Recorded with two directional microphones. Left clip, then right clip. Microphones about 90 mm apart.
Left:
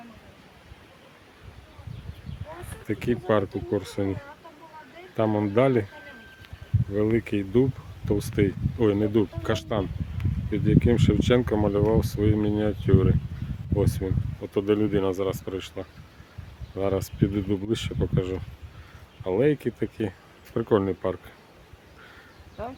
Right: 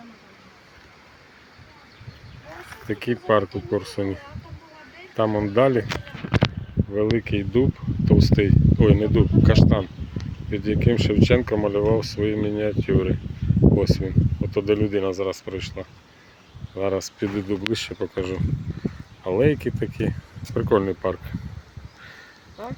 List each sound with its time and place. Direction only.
2.8 s speech: 5° left (ahead or behind)
6.9 s speech: 10° left (ahead or behind)